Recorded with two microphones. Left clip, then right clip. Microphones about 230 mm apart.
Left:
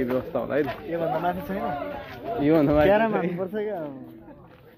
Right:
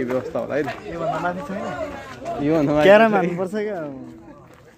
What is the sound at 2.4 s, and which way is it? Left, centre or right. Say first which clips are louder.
Speech: right 2 dB; centre.